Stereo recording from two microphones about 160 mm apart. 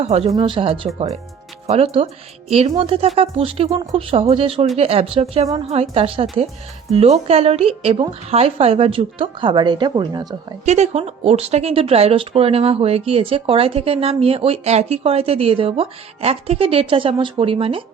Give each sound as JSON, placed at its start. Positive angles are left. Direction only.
{"t": 0.0, "sound": "speech", "side_deg": -40}
{"t": 0.3, "sound": "speech", "side_deg": -30}
{"t": 10.7, "sound": "speech", "side_deg": -45}